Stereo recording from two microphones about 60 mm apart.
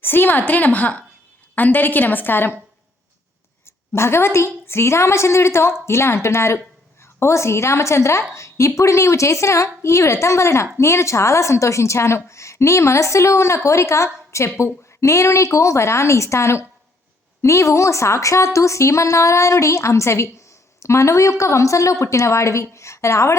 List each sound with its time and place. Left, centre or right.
0.0 s a woman's voice: left
3.9 s a woman's voice: left